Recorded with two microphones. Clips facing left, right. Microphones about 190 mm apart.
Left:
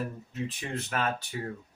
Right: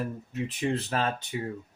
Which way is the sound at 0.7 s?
35° right (ahead or behind).